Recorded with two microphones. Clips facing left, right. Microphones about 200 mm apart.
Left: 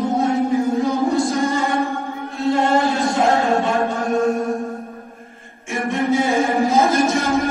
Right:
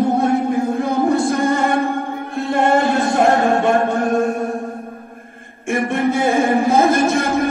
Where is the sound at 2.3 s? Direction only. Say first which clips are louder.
Right 1 dB; 55° right (ahead or behind).